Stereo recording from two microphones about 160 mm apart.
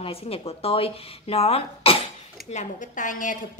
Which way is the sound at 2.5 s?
55° left (ahead or behind).